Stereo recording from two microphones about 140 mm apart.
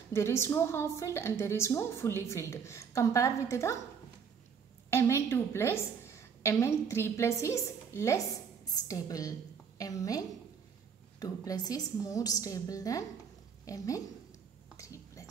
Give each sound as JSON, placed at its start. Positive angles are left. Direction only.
{"t": 0.1, "sound": "a woman's voice", "side_deg": 20}
{"t": 4.9, "sound": "a woman's voice", "side_deg": 20}
{"t": 14.8, "sound": "a sound", "side_deg": 20}